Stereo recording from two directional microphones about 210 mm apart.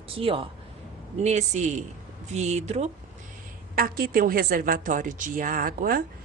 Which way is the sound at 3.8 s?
45° right (ahead or behind).